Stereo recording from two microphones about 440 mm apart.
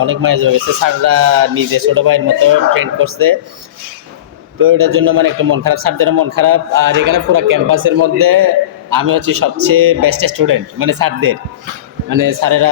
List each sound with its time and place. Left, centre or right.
0.0 s a man's voice: right
4.6 s a man's voice: right